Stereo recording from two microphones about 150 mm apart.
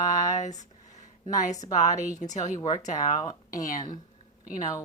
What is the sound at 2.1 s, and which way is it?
Speech, 55° left (ahead or behind).